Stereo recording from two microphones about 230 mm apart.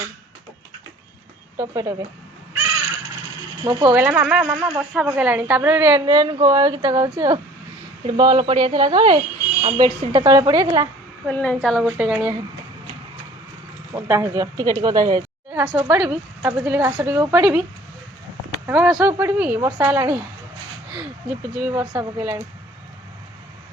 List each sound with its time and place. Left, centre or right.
1.5 s a woman's voice: centre
3.6 s a woman's voice: centre
3.9 s a woman's voice: centre
11.3 s a woman's voice: centre
13.9 s a woman's voice: centre
21.6 s a woman's voice: centre